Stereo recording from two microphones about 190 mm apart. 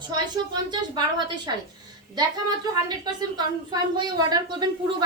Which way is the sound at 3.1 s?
20° right (ahead or behind).